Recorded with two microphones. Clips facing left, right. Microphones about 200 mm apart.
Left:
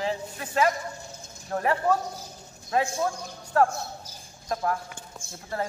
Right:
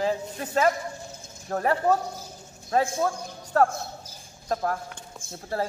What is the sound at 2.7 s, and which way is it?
A man's voice, 35° right (ahead or behind).